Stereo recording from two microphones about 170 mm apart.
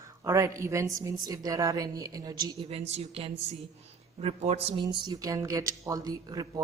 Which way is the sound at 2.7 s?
35° right (ahead or behind).